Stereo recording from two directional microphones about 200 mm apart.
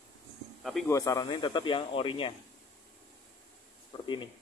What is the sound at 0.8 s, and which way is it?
Speech, 15° left (ahead or behind).